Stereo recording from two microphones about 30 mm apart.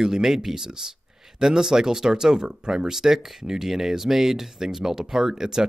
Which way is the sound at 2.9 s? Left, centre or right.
Centre.